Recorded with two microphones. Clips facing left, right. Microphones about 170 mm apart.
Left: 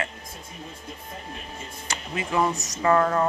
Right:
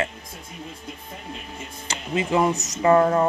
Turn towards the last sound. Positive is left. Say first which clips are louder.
# right 4 dB
turn(degrees=-25)  # may be behind; listen again after turning